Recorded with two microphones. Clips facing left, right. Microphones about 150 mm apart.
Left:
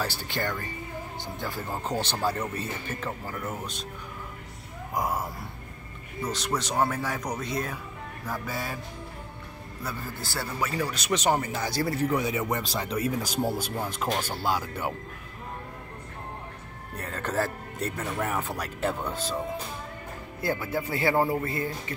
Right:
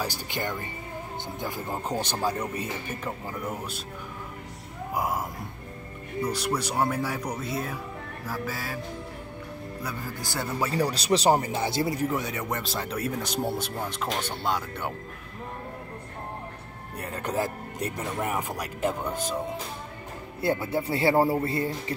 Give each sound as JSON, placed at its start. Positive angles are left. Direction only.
{"t": 0.0, "sound": "speech", "side_deg": -15}
{"t": 4.9, "sound": "speech", "side_deg": -10}
{"t": 6.2, "sound": "speech", "side_deg": -10}
{"t": 9.8, "sound": "speech", "side_deg": -20}
{"t": 10.6, "sound": "speech", "side_deg": -35}
{"t": 12.0, "sound": "speech", "side_deg": 0}
{"t": 16.9, "sound": "speech", "side_deg": -10}
{"t": 20.4, "sound": "speech", "side_deg": -30}